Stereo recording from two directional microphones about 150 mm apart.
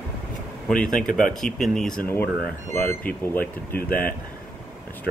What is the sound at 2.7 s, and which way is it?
Speech, 15° left (ahead or behind).